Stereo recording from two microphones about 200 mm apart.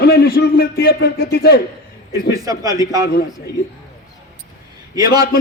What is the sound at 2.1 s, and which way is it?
A man's voice, 15° right (ahead or behind).